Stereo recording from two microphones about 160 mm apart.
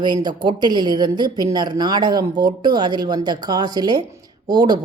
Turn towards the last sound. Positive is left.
turn(degrees=-25)  # may be behind; listen again after turning